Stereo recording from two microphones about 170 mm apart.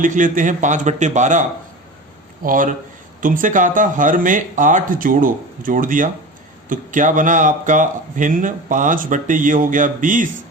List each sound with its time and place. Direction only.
0.0 s speech: 50° right (ahead or behind)